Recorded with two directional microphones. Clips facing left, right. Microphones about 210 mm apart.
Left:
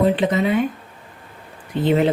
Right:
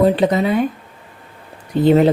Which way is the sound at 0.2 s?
40° right (ahead or behind).